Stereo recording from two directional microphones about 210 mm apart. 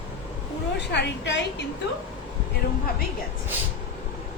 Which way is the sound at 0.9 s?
55° left (ahead or behind).